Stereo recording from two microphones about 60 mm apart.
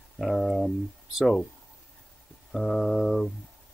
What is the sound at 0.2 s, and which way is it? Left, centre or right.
Speech, centre.